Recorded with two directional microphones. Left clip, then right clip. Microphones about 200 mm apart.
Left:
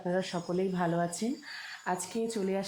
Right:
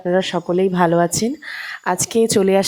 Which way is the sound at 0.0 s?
40° right (ahead or behind).